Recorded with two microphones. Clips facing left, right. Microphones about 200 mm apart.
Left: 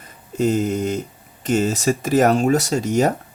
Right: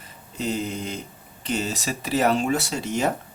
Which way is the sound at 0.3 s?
50° left (ahead or behind).